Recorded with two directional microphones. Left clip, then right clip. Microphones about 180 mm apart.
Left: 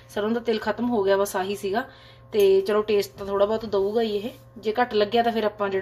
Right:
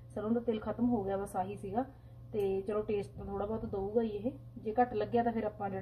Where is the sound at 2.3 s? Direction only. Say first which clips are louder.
Left 15 dB; 55° left (ahead or behind).